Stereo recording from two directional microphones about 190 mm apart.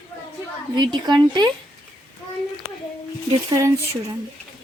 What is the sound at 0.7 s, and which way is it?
Speech, 25° right (ahead or behind).